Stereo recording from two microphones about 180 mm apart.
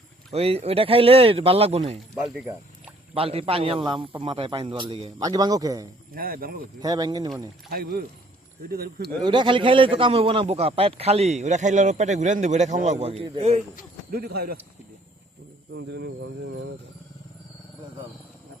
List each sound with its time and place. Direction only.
0.3 s a man's voice: 35° right (ahead or behind)
2.1 s speech: 10° right (ahead or behind)
3.2 s a man's voice: 30° right (ahead or behind)
5.2 s speech: 20° right (ahead or behind)
6.1 s speech: 55° right (ahead or behind)
6.7 s speech: 20° right (ahead or behind)
7.7 s speech: 55° right (ahead or behind)
9.2 s a man's voice: 25° right (ahead or behind)
14.1 s speech: 60° right (ahead or behind)
15.7 s speech: 80° right